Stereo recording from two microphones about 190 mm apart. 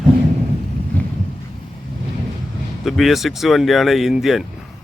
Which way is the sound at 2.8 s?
Centre (ahead or behind).